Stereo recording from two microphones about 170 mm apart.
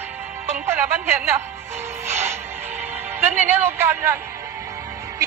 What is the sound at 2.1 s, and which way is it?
Music, 15° right (ahead or behind).